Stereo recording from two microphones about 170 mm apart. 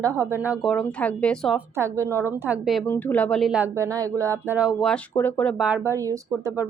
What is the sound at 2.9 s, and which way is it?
Speech, 10° left (ahead or behind).